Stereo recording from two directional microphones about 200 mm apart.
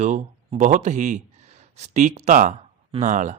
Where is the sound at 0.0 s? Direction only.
35° right (ahead or behind).